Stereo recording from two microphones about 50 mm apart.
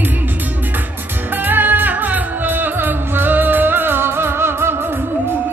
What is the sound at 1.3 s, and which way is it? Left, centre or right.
Music, right.